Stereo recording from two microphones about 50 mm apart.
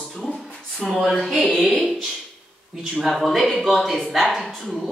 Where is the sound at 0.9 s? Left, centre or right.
Centre.